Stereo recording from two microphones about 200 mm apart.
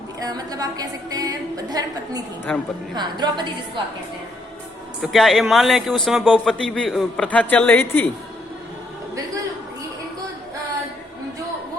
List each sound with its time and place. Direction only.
0.2 s a woman's voice: 20° right (ahead or behind)
2.5 s a man's voice: 5° left (ahead or behind)
2.9 s a woman's voice: 20° right (ahead or behind)
5.0 s a man's voice: centre (ahead or behind)